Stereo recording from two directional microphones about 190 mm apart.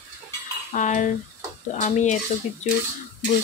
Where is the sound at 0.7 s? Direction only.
40° left (ahead or behind).